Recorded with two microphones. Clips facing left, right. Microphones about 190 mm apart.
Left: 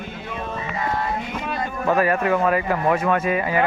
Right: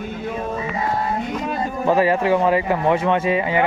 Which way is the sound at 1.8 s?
25° right (ahead or behind).